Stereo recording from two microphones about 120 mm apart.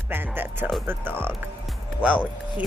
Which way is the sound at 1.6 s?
10° right (ahead or behind).